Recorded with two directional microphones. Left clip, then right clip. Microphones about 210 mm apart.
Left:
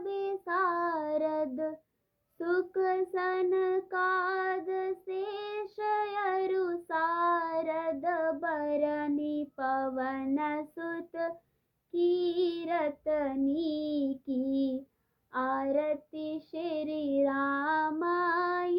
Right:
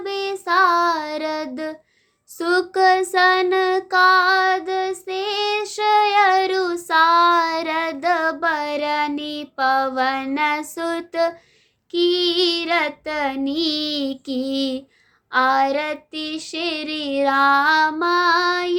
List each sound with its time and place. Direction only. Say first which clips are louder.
0.0 s music: right 9 dB; 10° right (ahead or behind)
2.4 s child singing: right 13 dB; 20° right (ahead or behind)
11.9 s female singing: right 10 dB; 20° right (ahead or behind)